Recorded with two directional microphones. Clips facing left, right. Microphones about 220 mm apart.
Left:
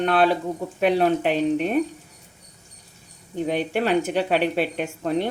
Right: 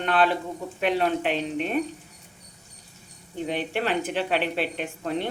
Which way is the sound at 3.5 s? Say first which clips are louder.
Left 5 dB; 45° left (ahead or behind).